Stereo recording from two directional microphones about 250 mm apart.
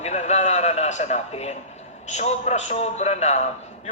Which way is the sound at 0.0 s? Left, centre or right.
Left.